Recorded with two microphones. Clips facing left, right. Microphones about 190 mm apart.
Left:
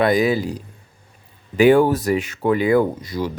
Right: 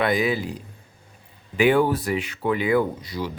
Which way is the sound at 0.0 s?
40° left (ahead or behind).